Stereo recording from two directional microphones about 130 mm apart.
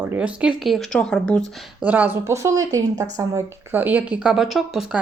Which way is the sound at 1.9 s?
15° right (ahead or behind).